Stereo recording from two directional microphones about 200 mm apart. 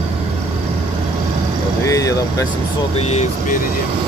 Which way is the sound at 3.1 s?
35° left (ahead or behind).